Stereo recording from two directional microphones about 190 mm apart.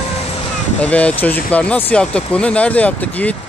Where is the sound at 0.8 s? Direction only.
5° left (ahead or behind).